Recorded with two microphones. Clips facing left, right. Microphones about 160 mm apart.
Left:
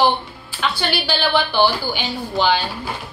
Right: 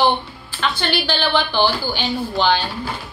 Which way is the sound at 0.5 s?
10° left (ahead or behind).